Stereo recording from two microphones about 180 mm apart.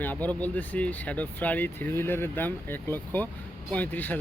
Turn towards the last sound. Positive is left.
turn(degrees=10)  # may be behind; listen again after turning